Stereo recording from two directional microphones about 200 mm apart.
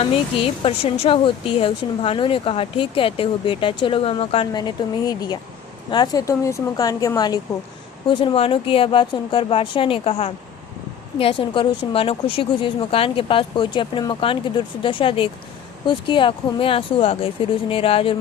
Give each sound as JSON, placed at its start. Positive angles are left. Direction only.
{"t": 0.0, "sound": "speech", "side_deg": 30}